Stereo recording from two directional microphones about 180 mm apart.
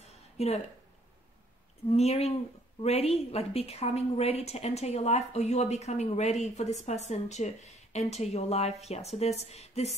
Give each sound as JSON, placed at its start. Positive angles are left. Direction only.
{"t": 0.4, "sound": "a woman's voice", "side_deg": 35}
{"t": 1.9, "sound": "a woman's voice", "side_deg": 35}